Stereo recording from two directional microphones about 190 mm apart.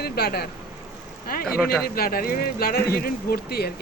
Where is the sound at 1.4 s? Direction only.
5° left (ahead or behind).